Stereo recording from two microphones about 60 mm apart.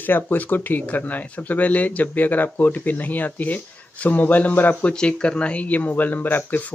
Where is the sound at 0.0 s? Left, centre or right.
Left.